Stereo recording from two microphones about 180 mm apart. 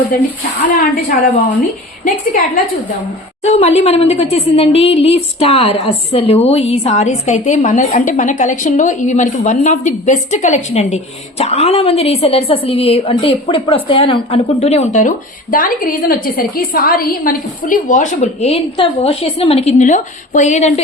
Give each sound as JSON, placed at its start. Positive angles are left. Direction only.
{"t": 0.7, "sound": "a woman's voice", "side_deg": 50}
{"t": 3.4, "sound": "a woman's voice", "side_deg": 35}